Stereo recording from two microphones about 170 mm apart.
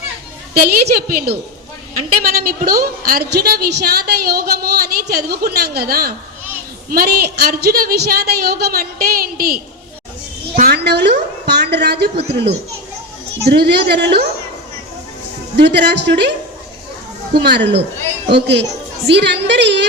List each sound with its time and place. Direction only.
0.5 s a woman's voice: 65° right (ahead or behind)
15.5 s a woman's voice: 75° right (ahead or behind)
17.4 s a woman's voice: 80° right